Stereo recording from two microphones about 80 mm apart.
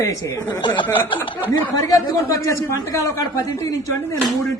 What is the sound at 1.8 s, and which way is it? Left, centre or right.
A man's voice, left.